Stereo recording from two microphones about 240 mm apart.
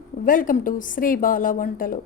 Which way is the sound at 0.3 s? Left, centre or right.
Left.